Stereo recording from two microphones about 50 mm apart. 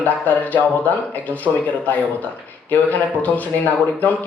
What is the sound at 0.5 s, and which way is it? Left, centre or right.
A man's voice, left.